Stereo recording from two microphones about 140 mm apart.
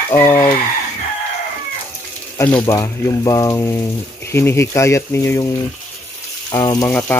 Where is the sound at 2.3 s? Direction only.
15° left (ahead or behind).